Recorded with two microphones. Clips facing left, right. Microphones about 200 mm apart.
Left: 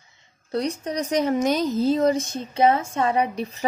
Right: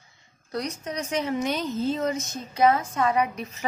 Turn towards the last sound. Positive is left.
turn(degrees=30)  # may be behind; listen again after turning